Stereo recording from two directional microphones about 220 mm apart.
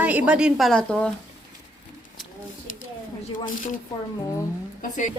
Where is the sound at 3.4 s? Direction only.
35° left (ahead or behind).